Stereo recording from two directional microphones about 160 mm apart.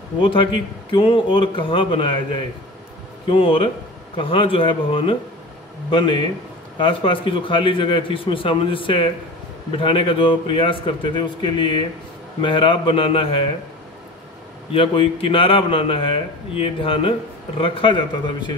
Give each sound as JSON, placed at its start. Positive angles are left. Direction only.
{"t": 0.2, "sound": "a man's voice", "side_deg": 35}
{"t": 14.7, "sound": "a man's voice", "side_deg": 35}